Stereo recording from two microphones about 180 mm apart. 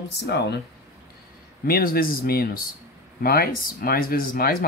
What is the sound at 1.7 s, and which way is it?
Speech, 55° left (ahead or behind).